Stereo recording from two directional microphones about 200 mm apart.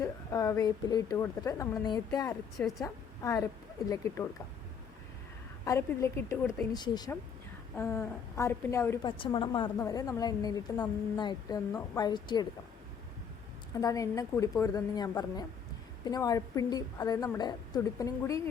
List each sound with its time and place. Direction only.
0.0 s a woman's voice: 15° left (ahead or behind)
2.6 s a woman's voice: centre (ahead or behind)
2.8 s a woman's voice: 15° left (ahead or behind)
5.6 s a woman's voice: 15° left (ahead or behind)
6.7 s a woman's voice: 20° left (ahead or behind)
9.1 s a woman's voice: 25° left (ahead or behind)
13.7 s a woman's voice: 15° left (ahead or behind)